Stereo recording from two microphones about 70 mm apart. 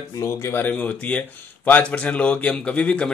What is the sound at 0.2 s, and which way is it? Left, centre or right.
Speech, left.